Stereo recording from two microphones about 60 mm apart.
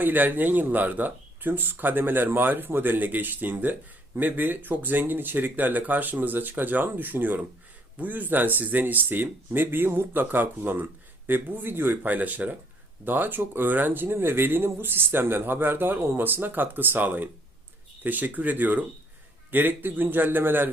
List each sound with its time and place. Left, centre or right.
0.0 s speech: right